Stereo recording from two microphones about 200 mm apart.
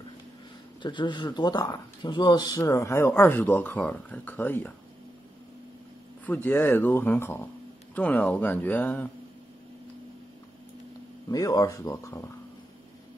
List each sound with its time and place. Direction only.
0.8 s speech: 20° left (ahead or behind)
6.2 s speech: 10° left (ahead or behind)
11.2 s speech: 15° left (ahead or behind)